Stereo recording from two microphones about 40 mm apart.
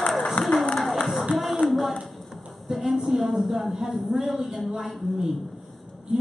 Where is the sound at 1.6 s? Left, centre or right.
Left.